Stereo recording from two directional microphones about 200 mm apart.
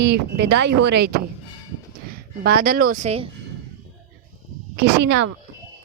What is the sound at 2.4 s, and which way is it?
Speech, 50° right (ahead or behind).